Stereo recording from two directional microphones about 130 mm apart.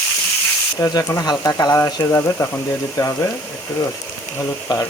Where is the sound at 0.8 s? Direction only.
25° left (ahead or behind).